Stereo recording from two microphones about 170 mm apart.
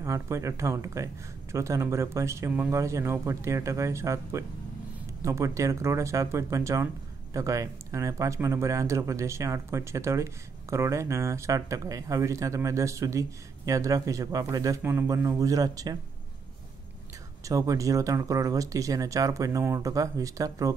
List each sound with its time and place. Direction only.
0.0 s speech: 15° right (ahead or behind)
17.5 s speech: 20° right (ahead or behind)